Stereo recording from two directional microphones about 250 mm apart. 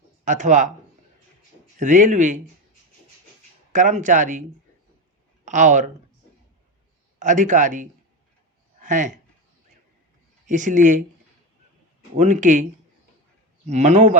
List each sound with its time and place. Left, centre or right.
0.3 s a man's voice: right
1.8 s speech: right
3.7 s speech: right
5.5 s a man's voice: right
7.2 s a man's voice: right
10.4 s speech: right
12.1 s a man's voice: right
13.7 s a man's voice: right